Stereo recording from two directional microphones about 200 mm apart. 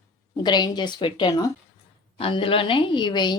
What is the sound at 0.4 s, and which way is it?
A woman's voice, 20° left (ahead or behind).